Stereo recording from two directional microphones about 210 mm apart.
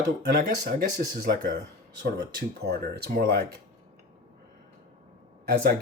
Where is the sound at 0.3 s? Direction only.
45° right (ahead or behind).